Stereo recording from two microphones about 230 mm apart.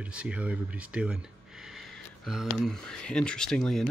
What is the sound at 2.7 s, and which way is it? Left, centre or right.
Speech, centre.